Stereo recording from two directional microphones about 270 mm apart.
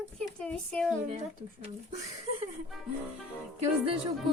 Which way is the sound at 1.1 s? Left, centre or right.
Right.